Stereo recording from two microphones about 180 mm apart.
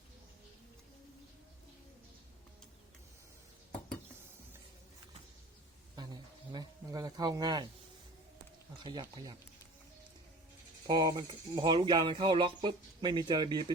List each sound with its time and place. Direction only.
6.0 s a sound: 25° right (ahead or behind)
8.8 s speech: 25° right (ahead or behind)
10.8 s speech: 25° right (ahead or behind)